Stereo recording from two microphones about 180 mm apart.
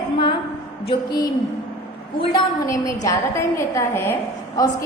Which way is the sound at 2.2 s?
20° left (ahead or behind).